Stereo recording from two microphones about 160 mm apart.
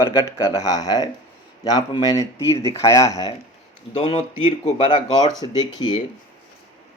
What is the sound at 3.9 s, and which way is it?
Speech, 40° left (ahead or behind).